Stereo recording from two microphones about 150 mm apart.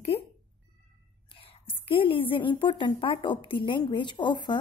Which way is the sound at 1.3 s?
35° left (ahead or behind).